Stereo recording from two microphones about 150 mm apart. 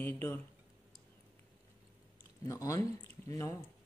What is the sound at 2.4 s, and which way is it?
Speech, 20° left (ahead or behind).